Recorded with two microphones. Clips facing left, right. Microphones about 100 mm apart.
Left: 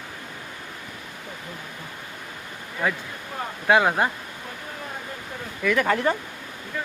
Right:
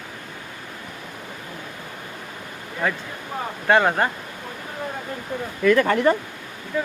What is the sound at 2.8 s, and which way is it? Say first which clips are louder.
Speech: right 1 dB; 5° left (ahead or behind).